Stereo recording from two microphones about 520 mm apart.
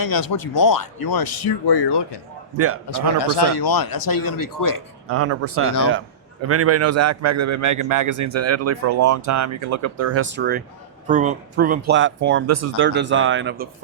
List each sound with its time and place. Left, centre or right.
0.0 s speech: left
2.6 s speech: right
2.9 s speech: left
5.0 s a man's voice: right